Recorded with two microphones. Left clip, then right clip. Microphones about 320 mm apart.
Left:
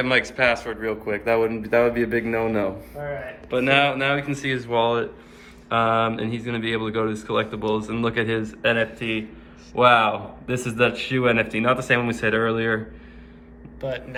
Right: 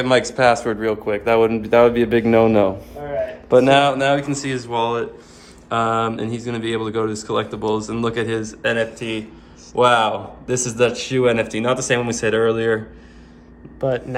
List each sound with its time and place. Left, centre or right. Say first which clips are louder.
0.0 s a man's voice: right 5 dB; centre
13.8 s speech: right 8 dB; right